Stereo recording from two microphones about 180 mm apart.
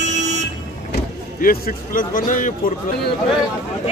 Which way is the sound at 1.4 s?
50° left (ahead or behind).